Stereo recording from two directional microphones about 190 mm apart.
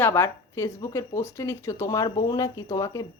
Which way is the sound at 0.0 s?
15° left (ahead or behind).